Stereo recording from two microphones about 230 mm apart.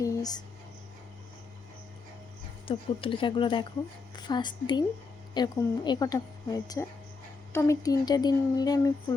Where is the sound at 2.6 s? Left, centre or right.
Left.